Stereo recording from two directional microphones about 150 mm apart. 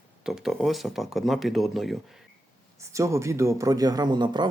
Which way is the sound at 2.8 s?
20° right (ahead or behind).